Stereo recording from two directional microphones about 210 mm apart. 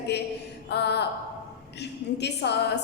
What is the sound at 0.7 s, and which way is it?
A woman's voice, 55° left (ahead or behind).